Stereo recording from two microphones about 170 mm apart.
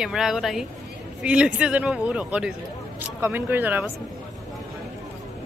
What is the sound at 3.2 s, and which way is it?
Speech, 15° right (ahead or behind).